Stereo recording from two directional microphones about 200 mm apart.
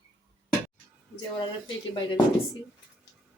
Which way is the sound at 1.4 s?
25° left (ahead or behind).